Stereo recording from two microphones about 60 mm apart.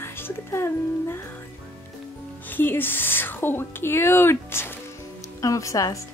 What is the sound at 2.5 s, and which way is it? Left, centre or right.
Speech, left.